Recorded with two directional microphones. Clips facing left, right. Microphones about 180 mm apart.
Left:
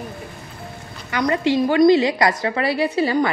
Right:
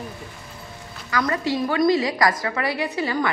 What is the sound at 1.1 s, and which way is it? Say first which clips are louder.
A woman's voice: left 4 dB; 20° left (ahead or behind).